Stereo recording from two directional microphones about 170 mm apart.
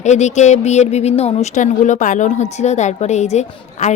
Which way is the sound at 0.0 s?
45° left (ahead or behind).